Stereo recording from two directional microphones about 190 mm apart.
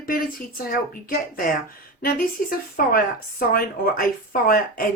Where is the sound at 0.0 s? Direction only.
50° left (ahead or behind).